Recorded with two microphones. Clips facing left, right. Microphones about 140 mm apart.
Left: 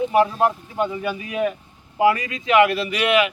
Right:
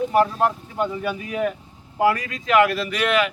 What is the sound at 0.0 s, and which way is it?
Speech, 5° left (ahead or behind).